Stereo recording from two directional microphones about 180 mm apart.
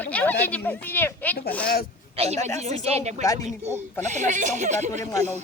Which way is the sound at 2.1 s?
35° right (ahead or behind).